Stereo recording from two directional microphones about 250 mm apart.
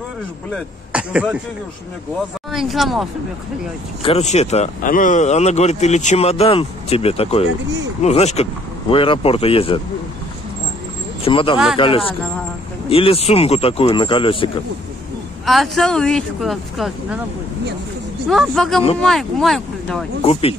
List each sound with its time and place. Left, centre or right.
0.5 s speech: centre
2.5 s speech: centre
4.0 s speech: left
11.2 s speech: left
15.4 s speech: centre
18.3 s speech: centre
20.2 s speech: left